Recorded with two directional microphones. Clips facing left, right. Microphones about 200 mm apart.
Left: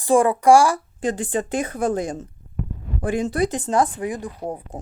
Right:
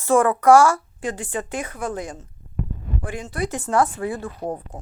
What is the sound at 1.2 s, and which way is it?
Speech, 35° left (ahead or behind).